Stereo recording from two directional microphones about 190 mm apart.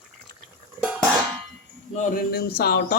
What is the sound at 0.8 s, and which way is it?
Music, 5° right (ahead or behind).